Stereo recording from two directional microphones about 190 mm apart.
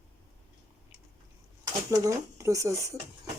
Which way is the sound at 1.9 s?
15° right (ahead or behind).